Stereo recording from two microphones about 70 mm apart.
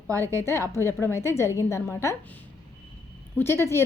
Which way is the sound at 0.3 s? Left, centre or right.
Left.